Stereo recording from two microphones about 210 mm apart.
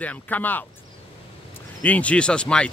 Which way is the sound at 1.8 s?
5° left (ahead or behind).